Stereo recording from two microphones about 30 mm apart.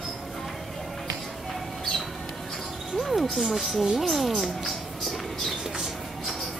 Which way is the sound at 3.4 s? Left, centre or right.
Centre.